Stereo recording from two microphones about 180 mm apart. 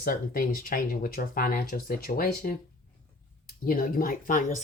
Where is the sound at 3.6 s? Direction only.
55° left (ahead or behind).